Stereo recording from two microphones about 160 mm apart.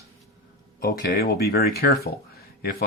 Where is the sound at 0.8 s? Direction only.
70° left (ahead or behind).